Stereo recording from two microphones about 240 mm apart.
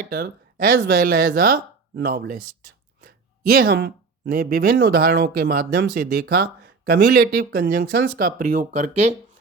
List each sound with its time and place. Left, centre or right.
0.0 s speech: right
3.5 s speech: right